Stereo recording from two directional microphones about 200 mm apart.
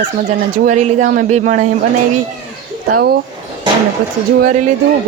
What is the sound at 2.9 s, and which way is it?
Speech, 50° right (ahead or behind).